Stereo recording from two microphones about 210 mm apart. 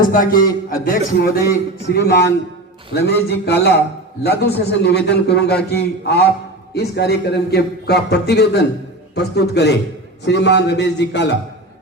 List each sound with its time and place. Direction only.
0.0 s a man's voice: 40° left (ahead or behind)